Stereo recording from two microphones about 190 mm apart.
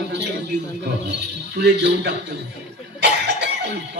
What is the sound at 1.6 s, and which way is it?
Speech, 60° right (ahead or behind).